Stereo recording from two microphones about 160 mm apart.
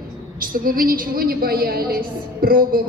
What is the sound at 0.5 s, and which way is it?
A woman's voice, 60° right (ahead or behind).